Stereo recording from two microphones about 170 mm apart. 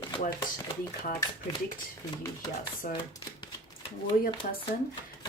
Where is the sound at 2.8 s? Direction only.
50° left (ahead or behind).